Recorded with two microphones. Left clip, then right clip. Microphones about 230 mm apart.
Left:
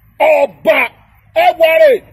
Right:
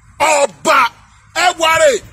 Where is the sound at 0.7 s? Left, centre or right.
Right.